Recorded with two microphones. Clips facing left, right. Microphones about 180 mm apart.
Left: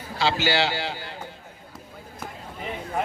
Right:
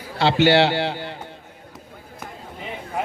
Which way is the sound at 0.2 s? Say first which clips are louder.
Right 7 dB; 65° right (ahead or behind).